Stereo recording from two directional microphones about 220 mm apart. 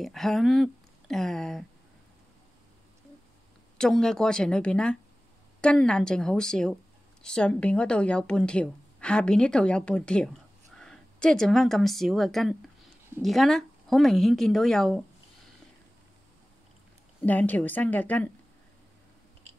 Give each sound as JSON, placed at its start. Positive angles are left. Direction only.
{"t": 0.0, "sound": "speech", "side_deg": 0}
{"t": 3.7, "sound": "a woman's voice", "side_deg": 5}
{"t": 17.2, "sound": "a woman's voice", "side_deg": 10}